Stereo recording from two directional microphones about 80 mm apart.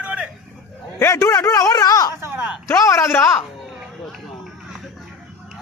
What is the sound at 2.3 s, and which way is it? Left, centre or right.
Speech, centre.